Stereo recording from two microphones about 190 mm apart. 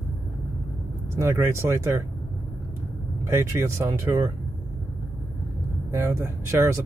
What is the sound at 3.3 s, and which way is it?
Speech, 15° right (ahead or behind).